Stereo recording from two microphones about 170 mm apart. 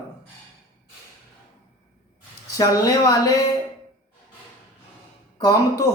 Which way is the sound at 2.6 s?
20° left (ahead or behind).